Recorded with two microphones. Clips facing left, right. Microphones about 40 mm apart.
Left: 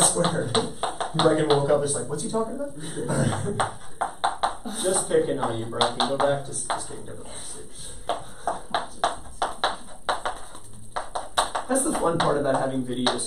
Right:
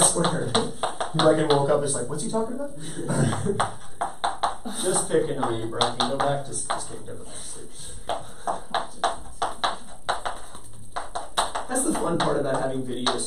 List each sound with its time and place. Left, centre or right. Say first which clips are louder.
0.2 s a sound: even; centre
1.2 s speech: right 1 dB; centre
5.8 s speech: left 2 dB; centre
6.0 s speech: left 2 dB; centre
8.1 s a sound: even; centre
11.5 s speech: left 1 dB; centre